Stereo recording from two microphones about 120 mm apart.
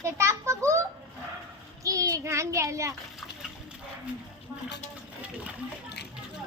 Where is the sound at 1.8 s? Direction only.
25° right (ahead or behind).